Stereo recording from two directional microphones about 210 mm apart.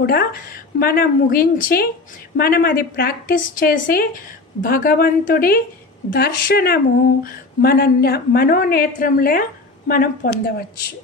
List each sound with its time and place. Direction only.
0.0 s a woman's voice: 45° left (ahead or behind)